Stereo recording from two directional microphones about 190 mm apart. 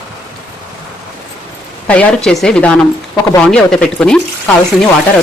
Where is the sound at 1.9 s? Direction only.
5° left (ahead or behind).